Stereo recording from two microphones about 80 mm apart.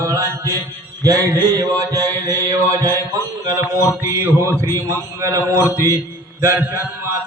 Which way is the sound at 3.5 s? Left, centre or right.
Right.